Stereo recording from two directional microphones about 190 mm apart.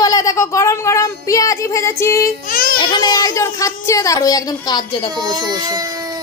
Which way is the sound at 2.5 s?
50° left (ahead or behind).